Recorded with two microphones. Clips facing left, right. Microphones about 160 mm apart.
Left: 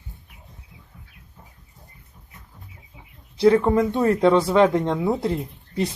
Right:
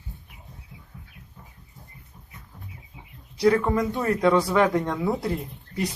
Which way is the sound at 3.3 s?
25° left (ahead or behind).